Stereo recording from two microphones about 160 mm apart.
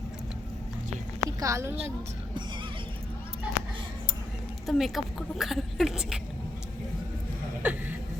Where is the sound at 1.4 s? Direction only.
20° right (ahead or behind).